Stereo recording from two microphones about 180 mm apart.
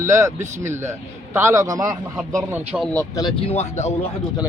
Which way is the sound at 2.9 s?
20° left (ahead or behind).